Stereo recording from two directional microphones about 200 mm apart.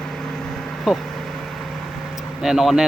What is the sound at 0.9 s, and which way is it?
Speech, centre (ahead or behind).